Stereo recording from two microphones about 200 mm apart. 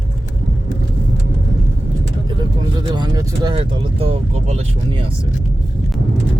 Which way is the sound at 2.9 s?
20° right (ahead or behind).